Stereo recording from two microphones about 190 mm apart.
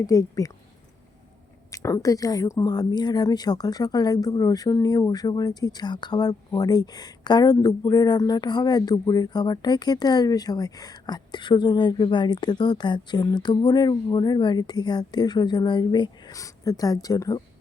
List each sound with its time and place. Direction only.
0.0 s speech: 15° left (ahead or behind)
1.7 s speech: 15° left (ahead or behind)